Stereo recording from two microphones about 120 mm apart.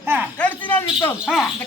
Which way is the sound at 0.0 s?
20° right (ahead or behind).